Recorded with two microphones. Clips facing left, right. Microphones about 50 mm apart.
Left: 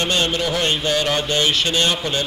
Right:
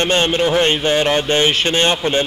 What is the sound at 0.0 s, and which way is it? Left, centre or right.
A man's voice, right.